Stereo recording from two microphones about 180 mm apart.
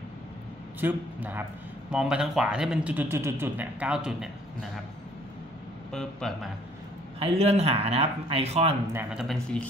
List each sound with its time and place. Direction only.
0.7 s a man's voice: 10° right (ahead or behind)
5.9 s speech: centre (ahead or behind)
7.2 s speech: 35° right (ahead or behind)
8.9 s speech: centre (ahead or behind)